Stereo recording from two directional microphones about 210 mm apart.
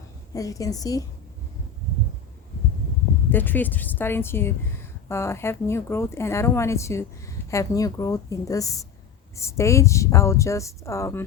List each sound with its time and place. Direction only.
0.3 s a woman's voice: 15° left (ahead or behind)
3.2 s a woman's voice: 10° left (ahead or behind)